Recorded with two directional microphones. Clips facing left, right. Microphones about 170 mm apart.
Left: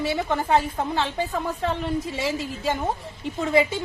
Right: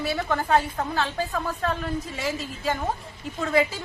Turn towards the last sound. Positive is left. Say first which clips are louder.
# left 2 dB
turn(degrees=25)  # may be behind; listen again after turning